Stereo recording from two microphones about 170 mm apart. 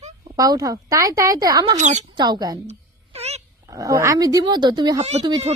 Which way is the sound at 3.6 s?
20° right (ahead or behind).